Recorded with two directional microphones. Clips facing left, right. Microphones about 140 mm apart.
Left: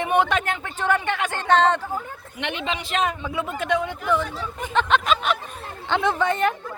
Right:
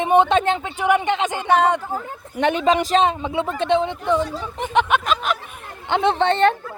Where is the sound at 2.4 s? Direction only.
40° right (ahead or behind).